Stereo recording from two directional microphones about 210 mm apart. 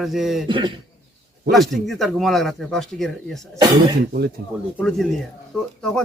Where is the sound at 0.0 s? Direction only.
Centre (ahead or behind).